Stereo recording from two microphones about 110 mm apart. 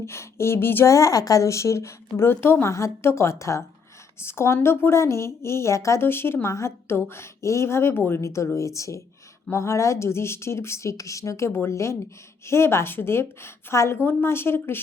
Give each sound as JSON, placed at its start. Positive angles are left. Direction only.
{"t": 0.0, "sound": "speech", "side_deg": 25}